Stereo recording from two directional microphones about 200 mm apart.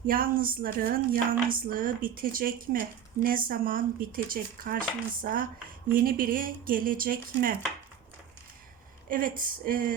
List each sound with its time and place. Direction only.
0.1 s speech: 45° right (ahead or behind)
9.0 s speech: 45° right (ahead or behind)